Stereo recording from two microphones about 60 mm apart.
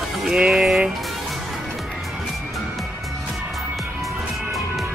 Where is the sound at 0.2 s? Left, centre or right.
Centre.